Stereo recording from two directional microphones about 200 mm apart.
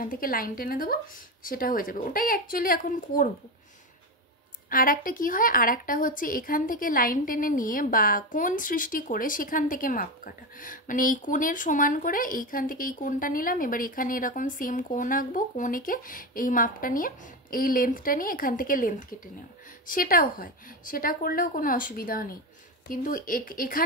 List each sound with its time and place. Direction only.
0.0 s a woman's voice: 45° left (ahead or behind)
4.6 s a woman's voice: 45° left (ahead or behind)